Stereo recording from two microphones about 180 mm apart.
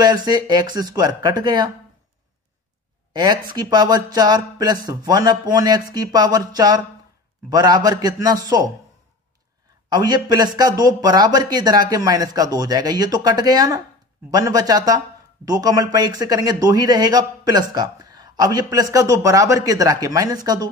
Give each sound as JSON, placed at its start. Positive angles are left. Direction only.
{"t": 0.0, "sound": "speech", "side_deg": -25}
{"t": 3.1, "sound": "a sound", "side_deg": -25}
{"t": 3.5, "sound": "speech", "side_deg": -25}
{"t": 9.8, "sound": "speech", "side_deg": -25}